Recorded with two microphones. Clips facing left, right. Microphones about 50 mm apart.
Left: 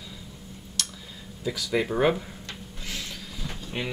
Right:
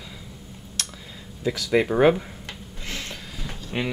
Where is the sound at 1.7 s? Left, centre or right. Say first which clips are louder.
Right 5 dB; centre.